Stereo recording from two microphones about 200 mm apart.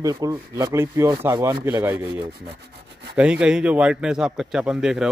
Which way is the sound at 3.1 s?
5° right (ahead or behind).